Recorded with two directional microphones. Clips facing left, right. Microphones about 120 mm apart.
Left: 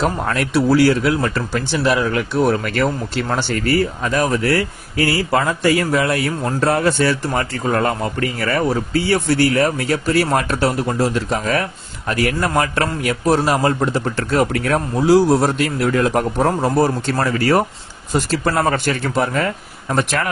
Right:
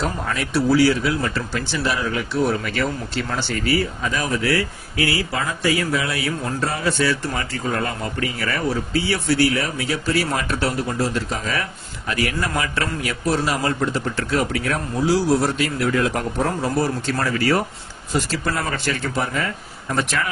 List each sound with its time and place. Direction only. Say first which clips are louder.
0.0 s speech: left 5 dB; 60° left (ahead or behind)